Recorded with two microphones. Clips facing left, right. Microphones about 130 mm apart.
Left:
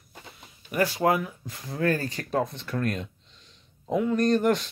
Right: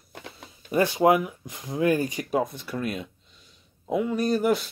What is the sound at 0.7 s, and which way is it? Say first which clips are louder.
Speech: right 4 dB; 25° right (ahead or behind).